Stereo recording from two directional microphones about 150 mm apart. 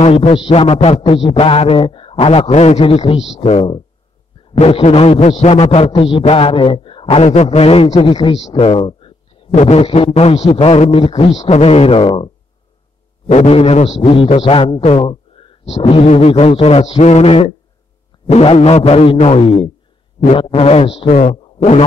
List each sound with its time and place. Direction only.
0.0 s a man's voice: 45° left (ahead or behind)
8.4 s a man's voice: 45° left (ahead or behind)
13.3 s a man's voice: 50° left (ahead or behind)
21.1 s speech: 55° left (ahead or behind)